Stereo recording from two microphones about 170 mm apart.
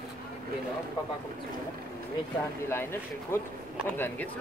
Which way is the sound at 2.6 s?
15° left (ahead or behind).